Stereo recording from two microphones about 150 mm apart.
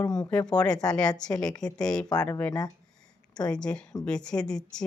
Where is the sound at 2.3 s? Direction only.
20° left (ahead or behind).